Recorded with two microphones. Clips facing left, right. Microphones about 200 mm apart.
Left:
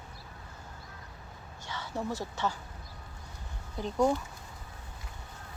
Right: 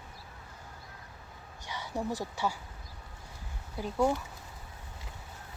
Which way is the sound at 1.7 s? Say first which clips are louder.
Right 1 dB; 15° right (ahead or behind).